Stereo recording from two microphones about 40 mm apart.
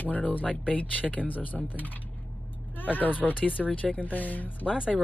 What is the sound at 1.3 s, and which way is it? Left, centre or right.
Speech, left.